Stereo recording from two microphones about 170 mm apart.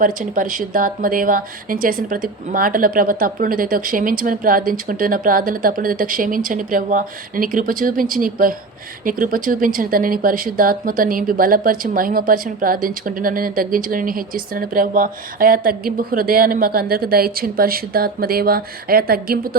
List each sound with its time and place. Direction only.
0.0 s speech: 50° right (ahead or behind)